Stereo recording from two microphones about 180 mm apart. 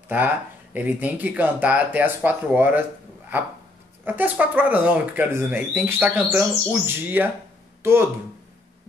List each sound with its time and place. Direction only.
0.1 s speech: 10° right (ahead or behind)
4.0 s speech: 10° right (ahead or behind)